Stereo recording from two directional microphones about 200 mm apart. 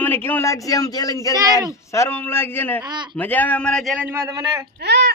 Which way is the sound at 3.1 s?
10° left (ahead or behind).